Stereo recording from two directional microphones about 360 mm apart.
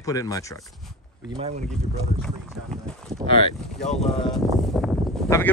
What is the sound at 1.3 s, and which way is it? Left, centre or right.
Speech, centre.